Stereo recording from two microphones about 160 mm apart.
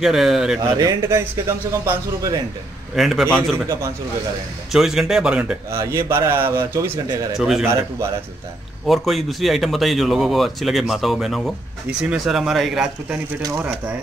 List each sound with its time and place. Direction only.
0.0 s speech: centre (ahead or behind)
0.6 s a man's voice: 20° right (ahead or behind)
3.0 s speech: centre (ahead or behind)
4.7 s speech: centre (ahead or behind)
5.7 s a man's voice: 15° right (ahead or behind)
7.3 s speech: centre (ahead or behind)
8.8 s speech: centre (ahead or behind)
13.4 s a man's voice: 20° right (ahead or behind)